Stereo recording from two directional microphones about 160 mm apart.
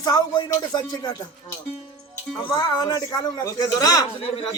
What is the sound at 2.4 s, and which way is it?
Speech, 30° left (ahead or behind).